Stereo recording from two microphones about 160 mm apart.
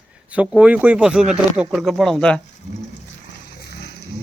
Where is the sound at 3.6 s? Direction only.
85° left.